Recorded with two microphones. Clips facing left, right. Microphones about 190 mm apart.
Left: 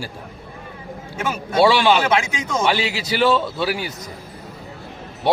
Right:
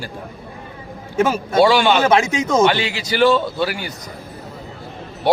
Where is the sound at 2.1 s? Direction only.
40° right (ahead or behind).